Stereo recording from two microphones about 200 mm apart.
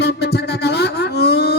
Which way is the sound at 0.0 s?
60° left (ahead or behind).